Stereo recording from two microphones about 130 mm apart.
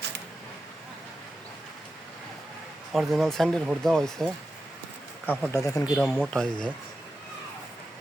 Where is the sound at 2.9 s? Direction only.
Centre (ahead or behind).